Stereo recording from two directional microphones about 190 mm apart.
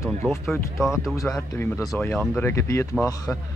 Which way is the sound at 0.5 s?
Centre (ahead or behind).